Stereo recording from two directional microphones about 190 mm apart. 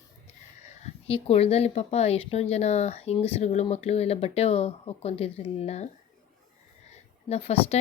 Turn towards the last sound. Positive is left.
turn(degrees=35)  # may be behind; listen again after turning